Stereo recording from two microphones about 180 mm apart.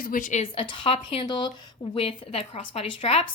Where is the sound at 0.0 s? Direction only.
50° left (ahead or behind).